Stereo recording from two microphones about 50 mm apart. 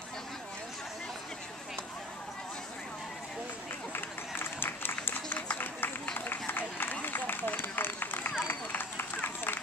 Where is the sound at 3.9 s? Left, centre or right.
Left.